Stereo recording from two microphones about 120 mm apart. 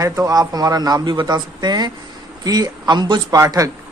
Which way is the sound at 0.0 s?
30° right (ahead or behind).